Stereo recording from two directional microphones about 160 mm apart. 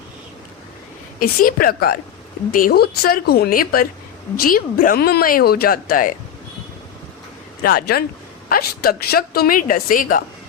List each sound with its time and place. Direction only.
1.2 s a woman's voice: 65° left (ahead or behind)
7.6 s a woman's voice: 75° left (ahead or behind)